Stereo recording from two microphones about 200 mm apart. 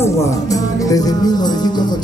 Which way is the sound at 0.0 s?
15° left (ahead or behind).